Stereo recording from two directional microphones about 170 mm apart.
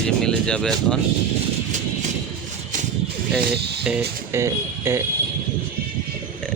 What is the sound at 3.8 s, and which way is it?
Speech, 10° right (ahead or behind).